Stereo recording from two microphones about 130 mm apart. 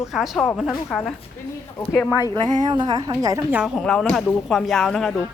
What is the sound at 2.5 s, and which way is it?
Speech, 30° right (ahead or behind).